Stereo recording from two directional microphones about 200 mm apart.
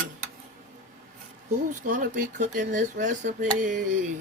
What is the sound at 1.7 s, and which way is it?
Speech, 40° right (ahead or behind).